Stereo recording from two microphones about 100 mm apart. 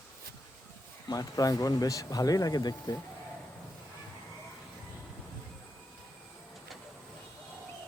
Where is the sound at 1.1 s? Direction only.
40° left (ahead or behind).